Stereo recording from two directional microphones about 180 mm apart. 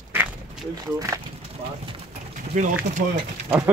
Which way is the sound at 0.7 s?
20° right (ahead or behind).